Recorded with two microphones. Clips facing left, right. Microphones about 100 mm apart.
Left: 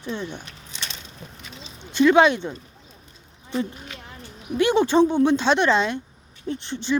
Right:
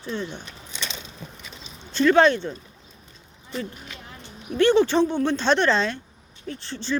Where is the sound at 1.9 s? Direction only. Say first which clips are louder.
Left 1 dB; 15° left (ahead or behind).